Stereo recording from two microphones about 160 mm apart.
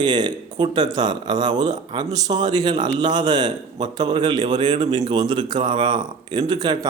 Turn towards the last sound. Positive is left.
turn(degrees=-30)  # may be behind; listen again after turning